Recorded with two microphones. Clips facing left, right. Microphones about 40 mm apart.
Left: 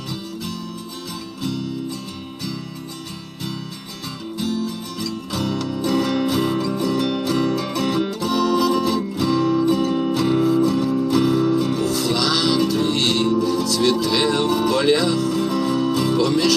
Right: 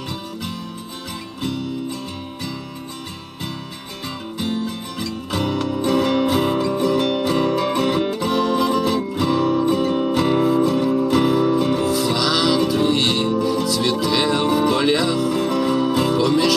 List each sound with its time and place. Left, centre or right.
4.4 s music: right; by 15.3 s centre
15.3 s music: right; by 16.6 s centre